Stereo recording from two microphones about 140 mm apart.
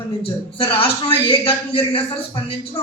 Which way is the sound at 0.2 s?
40° left (ahead or behind).